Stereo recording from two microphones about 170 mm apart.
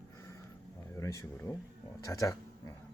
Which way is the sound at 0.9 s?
15° left (ahead or behind).